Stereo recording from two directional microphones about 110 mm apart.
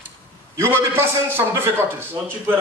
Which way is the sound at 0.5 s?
20° right (ahead or behind).